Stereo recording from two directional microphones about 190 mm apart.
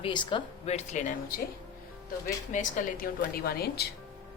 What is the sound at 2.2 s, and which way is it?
A woman's voice, 40° left (ahead or behind).